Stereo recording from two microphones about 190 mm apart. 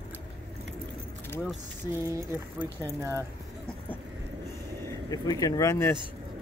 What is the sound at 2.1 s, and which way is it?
Speech, 15° right (ahead or behind).